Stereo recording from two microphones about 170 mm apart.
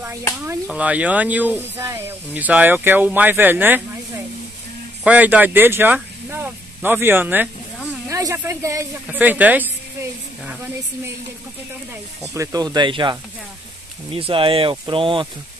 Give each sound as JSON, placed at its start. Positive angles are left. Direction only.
{"t": 0.7, "sound": "speech", "side_deg": -10}
{"t": 5.0, "sound": "speech", "side_deg": -10}
{"t": 6.3, "sound": "a sound", "side_deg": -10}
{"t": 8.1, "sound": "a woman's voice", "side_deg": -20}
{"t": 12.4, "sound": "speech", "side_deg": -20}